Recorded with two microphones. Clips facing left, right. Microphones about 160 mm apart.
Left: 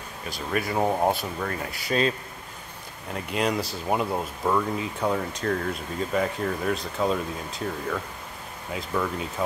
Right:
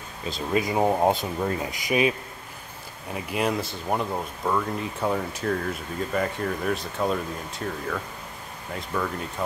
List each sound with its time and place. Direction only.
0.3 s speech: 20° right (ahead or behind); by 9.1 s 5° left (ahead or behind)